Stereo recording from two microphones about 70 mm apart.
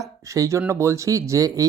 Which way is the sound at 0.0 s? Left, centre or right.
Right.